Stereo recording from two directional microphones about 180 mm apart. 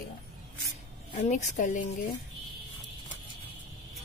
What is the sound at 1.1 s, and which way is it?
Speech, 40° left (ahead or behind).